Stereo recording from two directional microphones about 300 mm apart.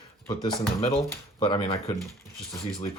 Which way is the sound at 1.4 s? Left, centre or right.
Centre.